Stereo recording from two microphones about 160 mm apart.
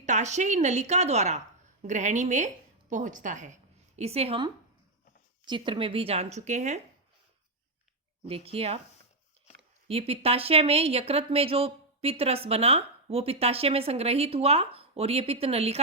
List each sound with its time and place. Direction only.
0.0 s a woman's voice: 45° right (ahead or behind)
5.5 s speech: 30° right (ahead or behind); by 6.7 s 50° right (ahead or behind)
8.3 s speech: 40° right (ahead or behind)
9.8 s speech: 35° right (ahead or behind)